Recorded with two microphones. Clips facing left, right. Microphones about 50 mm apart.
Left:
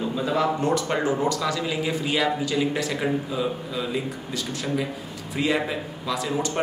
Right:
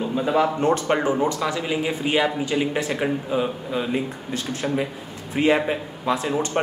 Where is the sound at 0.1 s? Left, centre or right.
Right.